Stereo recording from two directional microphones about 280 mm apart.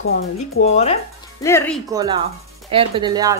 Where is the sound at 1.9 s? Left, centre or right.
Centre.